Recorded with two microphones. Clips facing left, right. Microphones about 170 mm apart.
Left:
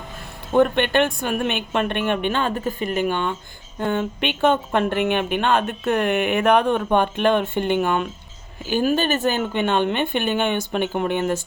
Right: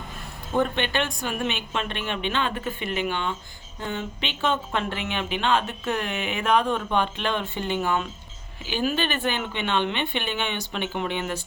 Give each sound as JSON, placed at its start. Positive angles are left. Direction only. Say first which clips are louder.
{"t": 0.5, "sound": "speech", "louder": "left 7 dB", "side_deg": 55}
{"t": 8.6, "sound": "speech", "louder": "left 6 dB", "side_deg": 45}